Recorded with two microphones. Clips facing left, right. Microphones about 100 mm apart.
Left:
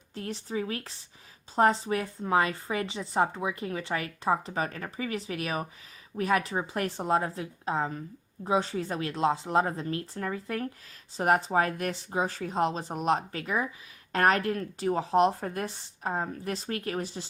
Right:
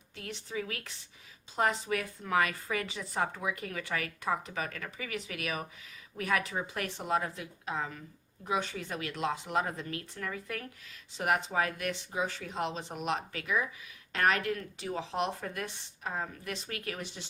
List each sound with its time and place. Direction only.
0.1 s speech: 35° left (ahead or behind)